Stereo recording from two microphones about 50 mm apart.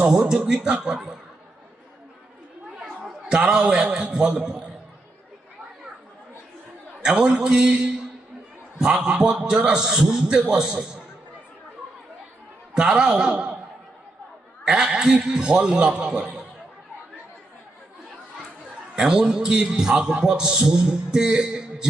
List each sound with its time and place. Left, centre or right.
0.0 s a man's voice: centre
2.8 s chatter: centre
3.9 s a man's voice: centre
7.0 s a man's voice: centre
9.0 s a man's voice: centre
12.7 s a man's voice: centre
14.6 s a man's voice: centre
18.9 s a man's voice: centre